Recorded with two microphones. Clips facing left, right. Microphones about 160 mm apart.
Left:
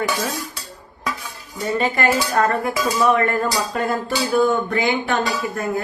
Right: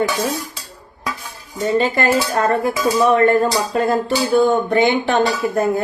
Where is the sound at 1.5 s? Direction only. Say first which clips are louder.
Right 4 dB; 30° right (ahead or behind).